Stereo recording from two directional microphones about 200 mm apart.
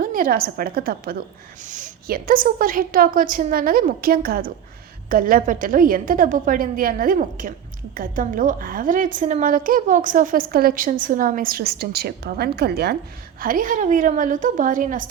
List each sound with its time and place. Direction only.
0.0 s a woman's voice: 45° right (ahead or behind)